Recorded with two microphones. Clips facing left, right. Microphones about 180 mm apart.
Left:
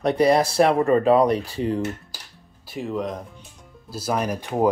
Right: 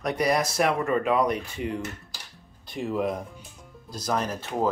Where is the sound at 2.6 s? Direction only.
Centre (ahead or behind).